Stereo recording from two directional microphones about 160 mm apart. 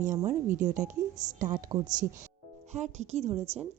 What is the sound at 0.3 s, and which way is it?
A woman's voice, 55° right (ahead or behind).